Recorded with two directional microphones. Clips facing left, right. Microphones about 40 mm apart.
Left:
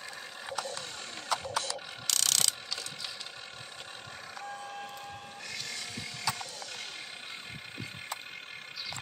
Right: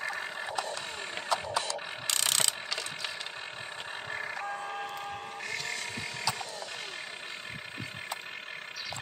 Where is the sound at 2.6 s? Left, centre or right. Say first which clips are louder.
Right 4 dB; right.